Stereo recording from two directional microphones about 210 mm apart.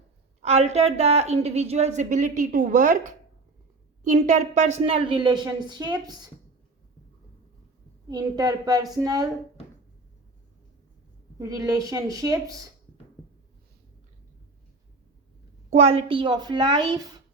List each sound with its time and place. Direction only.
0.4 s a woman's voice: 30° right (ahead or behind)
8.1 s a woman's voice: 20° right (ahead or behind)
11.3 s a woman's voice: 15° right (ahead or behind)
15.7 s a woman's voice: 30° right (ahead or behind)